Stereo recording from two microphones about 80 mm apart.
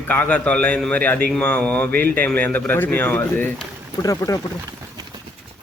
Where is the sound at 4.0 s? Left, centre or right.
Left.